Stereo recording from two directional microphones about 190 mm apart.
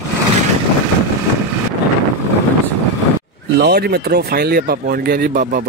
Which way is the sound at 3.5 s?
55° right (ahead or behind).